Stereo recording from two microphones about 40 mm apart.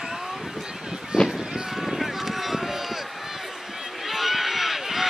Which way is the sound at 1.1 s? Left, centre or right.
Right.